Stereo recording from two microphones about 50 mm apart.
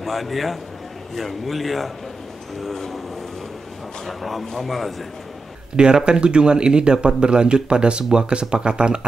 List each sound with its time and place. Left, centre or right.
0.0 s a man's voice: centre
4.0 s a man's voice: centre
6.0 s speech: centre